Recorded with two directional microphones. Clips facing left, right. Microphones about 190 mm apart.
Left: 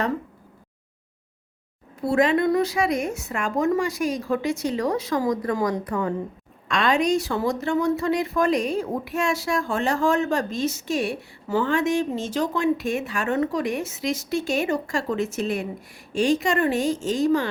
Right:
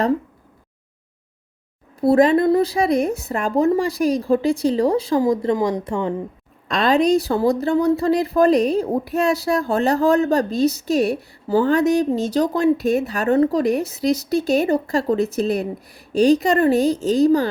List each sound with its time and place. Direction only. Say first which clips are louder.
2.0 s a woman's voice: right 6 dB; 35° right (ahead or behind)
6.7 s a woman's voice: right 5 dB; 35° right (ahead or behind)